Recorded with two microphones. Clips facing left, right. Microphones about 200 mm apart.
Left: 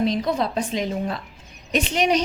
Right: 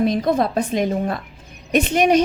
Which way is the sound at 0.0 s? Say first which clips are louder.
Right 4 dB; 50° right (ahead or behind).